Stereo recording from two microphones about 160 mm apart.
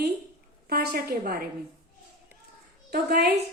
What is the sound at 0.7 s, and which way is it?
Speech, 75° right (ahead or behind).